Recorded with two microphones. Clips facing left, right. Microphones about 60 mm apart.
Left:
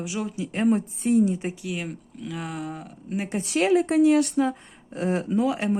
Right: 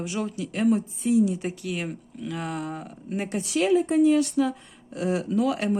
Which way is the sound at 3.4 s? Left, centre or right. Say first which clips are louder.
Left 1 dB; left.